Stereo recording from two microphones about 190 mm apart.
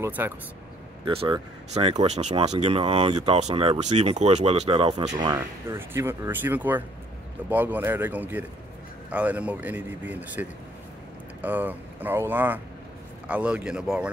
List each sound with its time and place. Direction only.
0.0 s speech: 10° right (ahead or behind)
1.0 s speech: 30° right (ahead or behind); by 14.1 s 5° right (ahead or behind)